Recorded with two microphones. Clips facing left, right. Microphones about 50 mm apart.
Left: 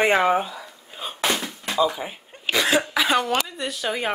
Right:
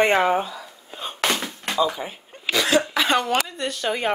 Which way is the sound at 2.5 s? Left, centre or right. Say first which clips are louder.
Right 1 dB; centre.